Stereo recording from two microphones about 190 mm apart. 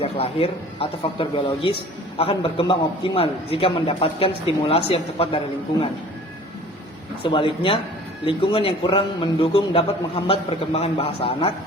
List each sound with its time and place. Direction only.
0.0 s a man's voice: 30° left (ahead or behind)
7.2 s a man's voice: 25° left (ahead or behind)